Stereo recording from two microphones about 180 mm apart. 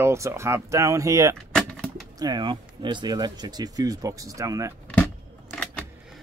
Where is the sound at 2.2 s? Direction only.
25° right (ahead or behind).